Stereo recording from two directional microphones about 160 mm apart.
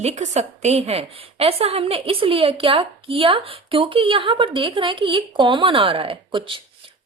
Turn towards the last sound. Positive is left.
turn(degrees=-35)  # may be behind; listen again after turning